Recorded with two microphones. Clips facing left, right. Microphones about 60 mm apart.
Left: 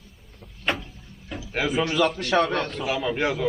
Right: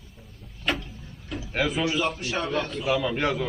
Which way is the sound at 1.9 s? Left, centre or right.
Left.